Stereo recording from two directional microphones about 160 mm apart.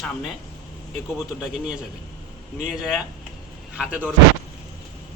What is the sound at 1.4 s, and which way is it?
A man's voice, 5° right (ahead or behind).